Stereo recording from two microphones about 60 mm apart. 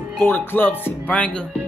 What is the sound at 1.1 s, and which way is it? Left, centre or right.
Speech, left.